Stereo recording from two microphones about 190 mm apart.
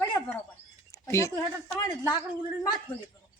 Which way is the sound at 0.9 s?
15° left (ahead or behind).